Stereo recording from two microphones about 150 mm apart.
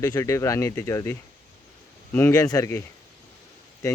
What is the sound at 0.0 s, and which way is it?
Speech, 20° left (ahead or behind).